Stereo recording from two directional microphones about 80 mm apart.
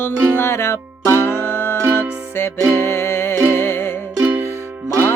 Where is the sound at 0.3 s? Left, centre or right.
Left.